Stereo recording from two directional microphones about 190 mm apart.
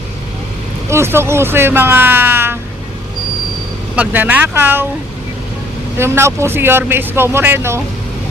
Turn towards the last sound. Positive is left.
turn(degrees=-15)  # may be behind; listen again after turning